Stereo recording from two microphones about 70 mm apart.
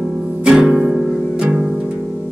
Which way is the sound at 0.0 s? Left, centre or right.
Centre.